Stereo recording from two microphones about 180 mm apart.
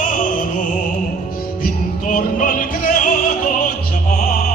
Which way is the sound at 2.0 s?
45° left (ahead or behind).